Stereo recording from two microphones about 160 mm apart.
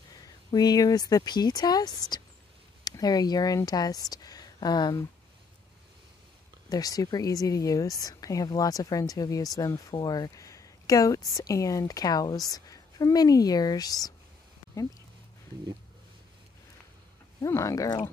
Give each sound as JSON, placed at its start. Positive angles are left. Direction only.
{"t": 0.2, "sound": "a woman's voice", "side_deg": 25}
{"t": 6.7, "sound": "a woman's voice", "side_deg": 20}
{"t": 17.4, "sound": "a woman's voice", "side_deg": 20}